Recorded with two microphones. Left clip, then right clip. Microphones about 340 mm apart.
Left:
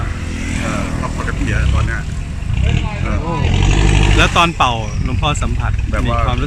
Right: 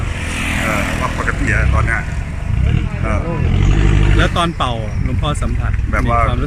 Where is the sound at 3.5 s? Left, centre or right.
Left.